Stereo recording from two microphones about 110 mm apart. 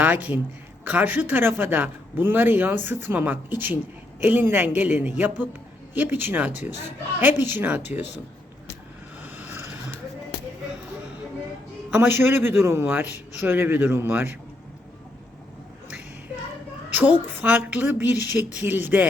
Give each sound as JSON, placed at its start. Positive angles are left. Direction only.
{"t": 0.0, "sound": "a man's voice", "side_deg": -15}
{"t": 9.2, "sound": "vehicle", "side_deg": -20}
{"t": 11.9, "sound": "a man's voice", "side_deg": -20}
{"t": 16.9, "sound": "speech", "side_deg": -15}